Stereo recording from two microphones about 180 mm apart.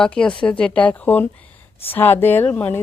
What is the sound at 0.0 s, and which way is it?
A woman's voice, 5° left (ahead or behind).